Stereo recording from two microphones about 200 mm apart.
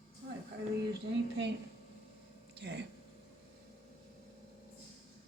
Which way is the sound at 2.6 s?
55° right (ahead or behind).